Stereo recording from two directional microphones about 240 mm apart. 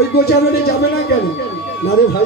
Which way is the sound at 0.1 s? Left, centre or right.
Left.